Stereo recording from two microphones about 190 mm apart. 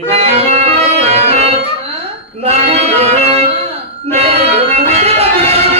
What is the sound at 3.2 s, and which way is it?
Music, 30° right (ahead or behind).